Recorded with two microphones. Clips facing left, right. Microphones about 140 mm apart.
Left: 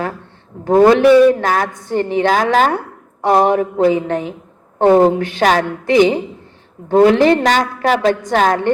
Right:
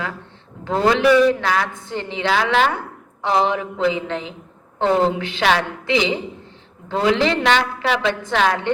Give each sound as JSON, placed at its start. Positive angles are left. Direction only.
{"t": 0.6, "sound": "a woman's voice", "side_deg": 50}